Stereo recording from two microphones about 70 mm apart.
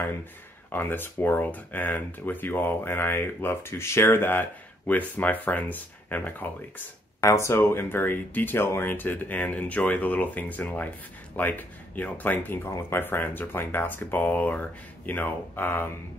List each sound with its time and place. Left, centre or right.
0.7 s speech: left
7.2 s speech: left
12.6 s speech: left